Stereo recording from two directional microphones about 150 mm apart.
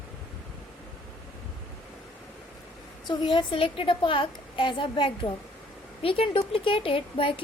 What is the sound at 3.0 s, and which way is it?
A woman's voice, 30° left (ahead or behind).